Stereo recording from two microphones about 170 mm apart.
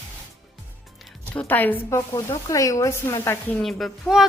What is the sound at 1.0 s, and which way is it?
Speech, 5° left (ahead or behind).